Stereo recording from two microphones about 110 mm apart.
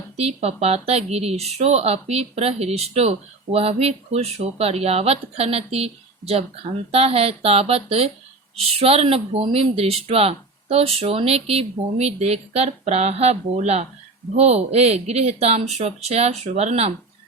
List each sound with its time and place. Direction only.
0.2 s speech: 75° right (ahead or behind)